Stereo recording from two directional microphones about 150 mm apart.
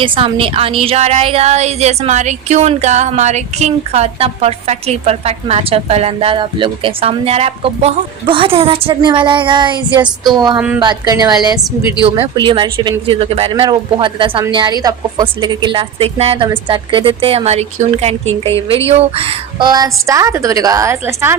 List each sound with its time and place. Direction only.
0.0 s a woman's voice: 35° right (ahead or behind)
12.0 s a woman's voice: 40° right (ahead or behind); by 21.3 s 15° right (ahead or behind)